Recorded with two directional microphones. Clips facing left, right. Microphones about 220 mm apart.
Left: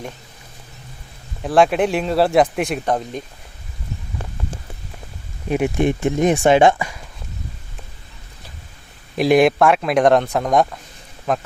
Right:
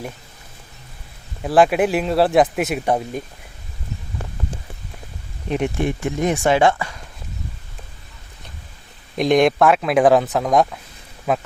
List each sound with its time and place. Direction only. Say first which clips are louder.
1.4 s speech: even; 5° right (ahead or behind)
5.5 s speech: left 2 dB; 5° left (ahead or behind)
5.8 s speech: left 4 dB; 25° left (ahead or behind)
9.1 s a man's voice: left 1 dB; 5° left (ahead or behind)